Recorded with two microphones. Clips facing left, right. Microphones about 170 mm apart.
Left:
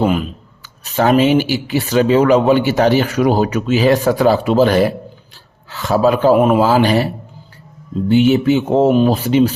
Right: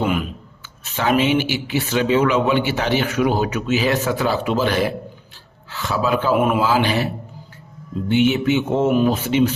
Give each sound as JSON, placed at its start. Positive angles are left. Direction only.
{"t": 0.0, "sound": "a sound", "side_deg": 35}
{"t": 0.9, "sound": "speech", "side_deg": 40}
{"t": 8.1, "sound": "speech", "side_deg": 40}